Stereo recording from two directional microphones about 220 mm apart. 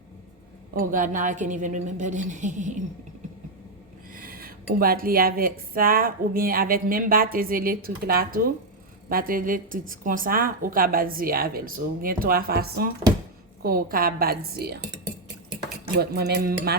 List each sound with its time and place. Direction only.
0.7 s speech: 40° right (ahead or behind)
4.1 s a woman's voice: 40° right (ahead or behind)
16.0 s a woman's voice: 45° right (ahead or behind)